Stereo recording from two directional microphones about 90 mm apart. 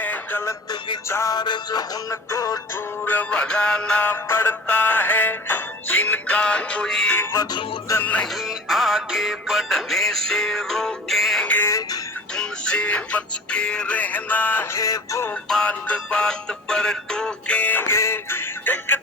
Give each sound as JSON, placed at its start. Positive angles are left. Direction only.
{"t": 0.0, "sound": "music", "side_deg": 20}
{"t": 1.3, "sound": "music", "side_deg": 50}
{"t": 3.0, "sound": "music", "side_deg": 20}
{"t": 4.0, "sound": "music", "side_deg": 25}
{"t": 8.0, "sound": "music", "side_deg": 15}
{"t": 8.4, "sound": "music", "side_deg": 0}
{"t": 11.4, "sound": "music", "side_deg": 20}
{"t": 14.8, "sound": "music", "side_deg": 40}
{"t": 15.4, "sound": "music", "side_deg": 5}